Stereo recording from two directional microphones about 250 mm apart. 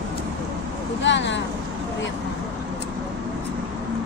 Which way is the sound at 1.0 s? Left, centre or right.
Left.